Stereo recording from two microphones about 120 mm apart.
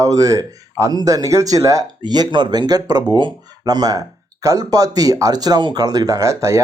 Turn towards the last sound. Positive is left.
turn(degrees=-25)  # may be behind; listen again after turning